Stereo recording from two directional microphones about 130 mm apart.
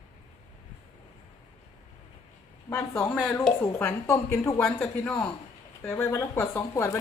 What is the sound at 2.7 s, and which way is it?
Speech, 15° left (ahead or behind).